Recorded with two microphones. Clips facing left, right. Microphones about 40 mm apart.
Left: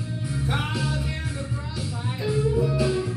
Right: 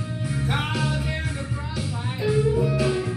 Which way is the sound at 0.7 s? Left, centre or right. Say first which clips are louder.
Right 2 dB; right.